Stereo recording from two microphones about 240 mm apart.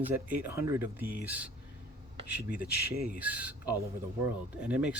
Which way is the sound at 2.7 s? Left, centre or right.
Left.